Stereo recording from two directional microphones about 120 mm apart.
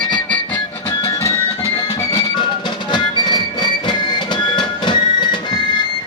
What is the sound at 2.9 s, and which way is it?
Music, 40° left (ahead or behind).